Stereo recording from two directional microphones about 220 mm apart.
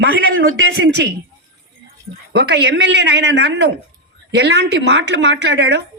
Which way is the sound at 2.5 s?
50° right (ahead or behind).